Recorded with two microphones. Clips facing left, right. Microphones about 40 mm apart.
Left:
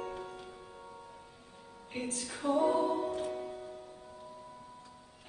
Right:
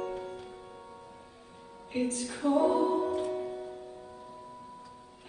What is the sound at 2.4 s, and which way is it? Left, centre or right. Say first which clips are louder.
Music: right 3 dB; right.